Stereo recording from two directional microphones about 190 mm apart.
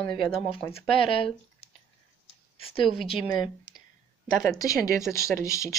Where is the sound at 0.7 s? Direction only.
30° left (ahead or behind).